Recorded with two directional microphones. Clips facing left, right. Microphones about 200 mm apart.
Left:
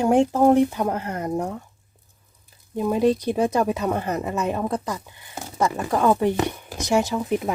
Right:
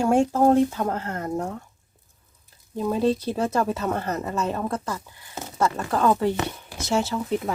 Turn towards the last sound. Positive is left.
turn(degrees=15)  # may be behind; listen again after turning